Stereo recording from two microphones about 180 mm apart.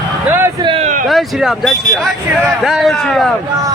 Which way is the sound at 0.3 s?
10° right (ahead or behind).